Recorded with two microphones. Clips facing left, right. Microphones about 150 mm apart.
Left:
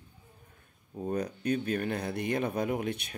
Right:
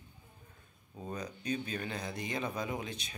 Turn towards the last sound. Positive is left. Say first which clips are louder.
# left 7 dB
turn(degrees=60)  # may be behind; listen again after turning